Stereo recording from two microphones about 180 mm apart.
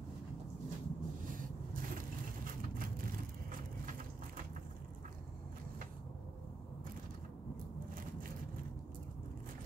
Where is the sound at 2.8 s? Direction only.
50° right (ahead or behind).